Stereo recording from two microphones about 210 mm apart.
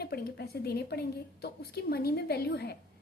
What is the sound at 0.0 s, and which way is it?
A woman's voice, 50° left (ahead or behind).